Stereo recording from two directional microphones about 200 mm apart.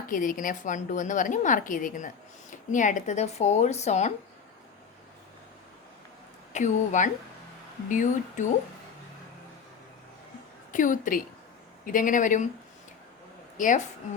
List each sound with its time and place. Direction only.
0.1 s a woman's voice: 40° left (ahead or behind)
6.5 s a woman's voice: 40° left (ahead or behind)
10.7 s a woman's voice: 40° left (ahead or behind)
13.6 s a woman's voice: 40° left (ahead or behind)